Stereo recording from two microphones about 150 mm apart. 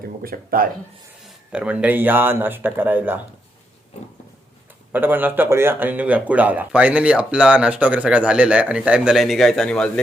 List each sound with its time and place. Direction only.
0.2 s speech: 75° right (ahead or behind)
1.2 s speech: 5° right (ahead or behind)
4.9 s speech: 15° right (ahead or behind); by 10.0 s 5° left (ahead or behind)